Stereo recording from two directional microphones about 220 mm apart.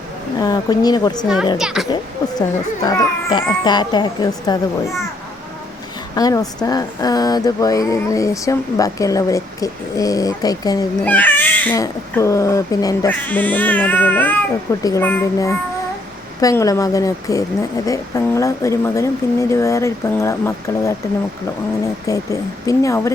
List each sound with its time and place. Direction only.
0.3 s speech: 15° left (ahead or behind)
1.5 s a child's voice: centre (ahead or behind)
2.8 s speech: 20° left (ahead or behind)
6.1 s speech: 15° left (ahead or behind)
22.0 s speech: 15° left (ahead or behind)